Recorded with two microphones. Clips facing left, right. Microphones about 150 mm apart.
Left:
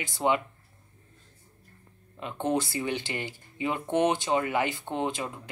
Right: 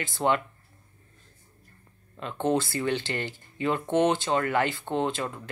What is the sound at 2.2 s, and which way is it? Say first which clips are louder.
Speech: right 2 dB; 10° left (ahead or behind).